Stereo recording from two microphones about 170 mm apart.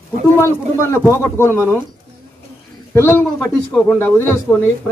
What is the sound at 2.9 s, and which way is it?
Speech, 15° left (ahead or behind).